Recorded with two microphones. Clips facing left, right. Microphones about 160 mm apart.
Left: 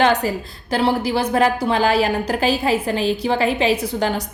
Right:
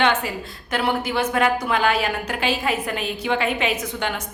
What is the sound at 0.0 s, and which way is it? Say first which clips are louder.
A woman's voice: left 4 dB; 40° left (ahead or behind).